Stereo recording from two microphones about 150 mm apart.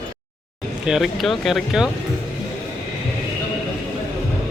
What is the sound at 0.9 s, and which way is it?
Speech, centre (ahead or behind).